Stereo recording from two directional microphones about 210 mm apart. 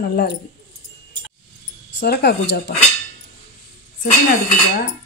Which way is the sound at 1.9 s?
50° left (ahead or behind).